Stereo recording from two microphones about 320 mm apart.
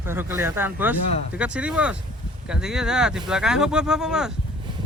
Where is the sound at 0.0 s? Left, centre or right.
Centre.